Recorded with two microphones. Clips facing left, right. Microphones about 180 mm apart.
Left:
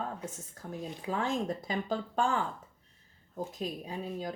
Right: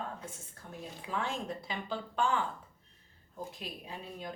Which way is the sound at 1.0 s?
40° left (ahead or behind).